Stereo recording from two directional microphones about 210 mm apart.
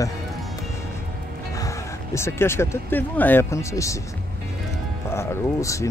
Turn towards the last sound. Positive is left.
turn(degrees=15)  # may be behind; listen again after turning